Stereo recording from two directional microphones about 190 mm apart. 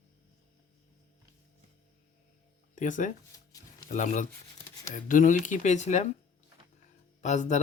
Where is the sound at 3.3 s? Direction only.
20° left (ahead or behind).